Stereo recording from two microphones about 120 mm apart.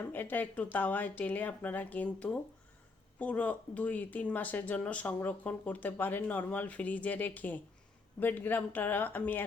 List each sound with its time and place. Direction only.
0.1 s speech: 15° left (ahead or behind)